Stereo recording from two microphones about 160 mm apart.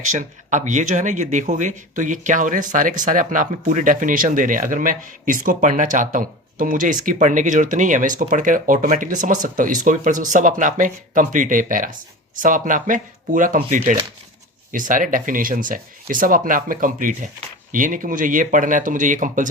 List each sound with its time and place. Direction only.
0.1 s speech: 50° right (ahead or behind)